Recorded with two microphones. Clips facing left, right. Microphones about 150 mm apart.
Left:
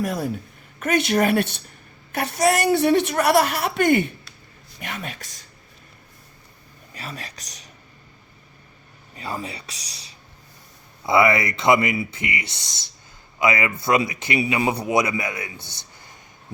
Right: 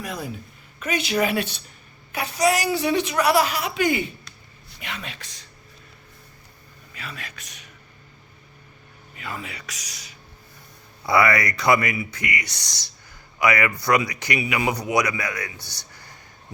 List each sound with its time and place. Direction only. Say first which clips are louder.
0.0 s a woman's voice: left 7 dB; 45° left (ahead or behind)
2.7 s a woman's voice: left 4 dB; 55° left (ahead or behind)
6.9 s speech: left 3 dB; 35° left (ahead or behind)
9.1 s speech: left 4 dB; 35° left (ahead or behind)
15.6 s a sound: even; 20° left (ahead or behind)